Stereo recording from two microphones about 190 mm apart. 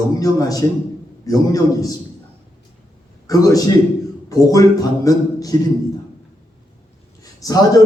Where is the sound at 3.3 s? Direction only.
20° left (ahead or behind).